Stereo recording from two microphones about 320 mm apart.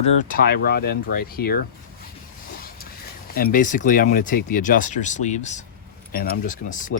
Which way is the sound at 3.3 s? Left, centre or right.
Left.